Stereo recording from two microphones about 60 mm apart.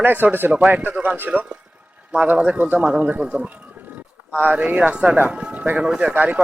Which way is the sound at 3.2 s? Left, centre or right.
Centre.